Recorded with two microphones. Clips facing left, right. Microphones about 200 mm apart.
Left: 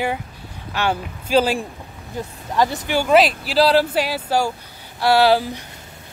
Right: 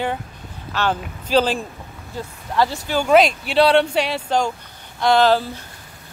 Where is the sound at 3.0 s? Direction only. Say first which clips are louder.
Right 1 dB; centre (ahead or behind).